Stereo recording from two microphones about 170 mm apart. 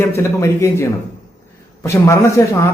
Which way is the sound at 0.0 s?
15° left (ahead or behind).